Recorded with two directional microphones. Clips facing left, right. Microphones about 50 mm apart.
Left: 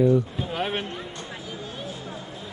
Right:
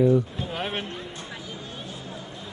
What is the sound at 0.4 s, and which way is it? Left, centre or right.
Speech, centre.